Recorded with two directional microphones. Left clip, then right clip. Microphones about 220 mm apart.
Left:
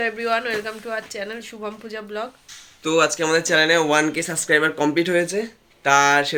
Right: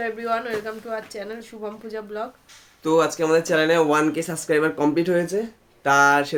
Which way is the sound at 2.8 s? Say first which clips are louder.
Left 1 dB; 20° right (ahead or behind).